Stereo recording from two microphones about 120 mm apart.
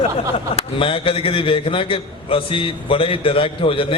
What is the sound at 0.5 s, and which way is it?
A man's voice, 45° left (ahead or behind).